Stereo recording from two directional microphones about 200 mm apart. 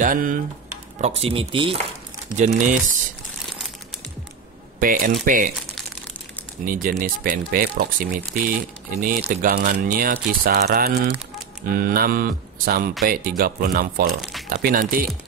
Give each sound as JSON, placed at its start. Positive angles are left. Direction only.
{"t": 0.0, "sound": "speech", "side_deg": -45}
{"t": 1.0, "sound": "speech", "side_deg": -30}
{"t": 2.3, "sound": "speech", "side_deg": -40}
{"t": 4.7, "sound": "speech", "side_deg": -45}
{"t": 6.6, "sound": "speech", "side_deg": -45}